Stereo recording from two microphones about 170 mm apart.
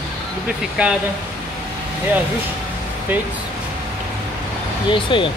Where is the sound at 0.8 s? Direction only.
10° right (ahead or behind).